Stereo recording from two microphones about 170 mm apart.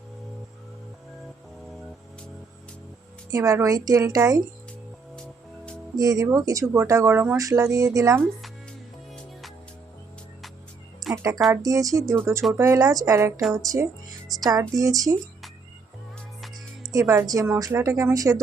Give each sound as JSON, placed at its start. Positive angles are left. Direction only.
{"t": 3.3, "sound": "speech", "side_deg": -20}
{"t": 6.0, "sound": "speech", "side_deg": -20}
{"t": 11.1, "sound": "speech", "side_deg": -15}
{"t": 16.9, "sound": "speech", "side_deg": -20}